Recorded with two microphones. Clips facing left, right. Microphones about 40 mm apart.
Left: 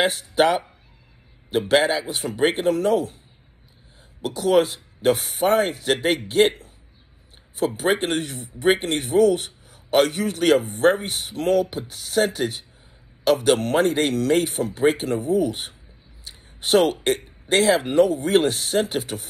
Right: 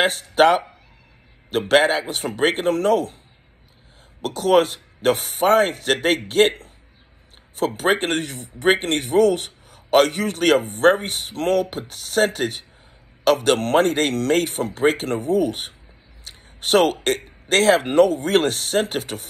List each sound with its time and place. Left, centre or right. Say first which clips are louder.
0.0 s speech: right 3 dB; right
4.2 s a man's voice: right 2 dB; right